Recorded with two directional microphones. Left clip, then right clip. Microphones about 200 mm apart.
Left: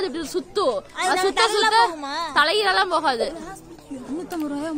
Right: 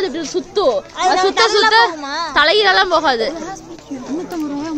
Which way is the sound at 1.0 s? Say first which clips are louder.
Right 6 dB; 35° left (ahead or behind).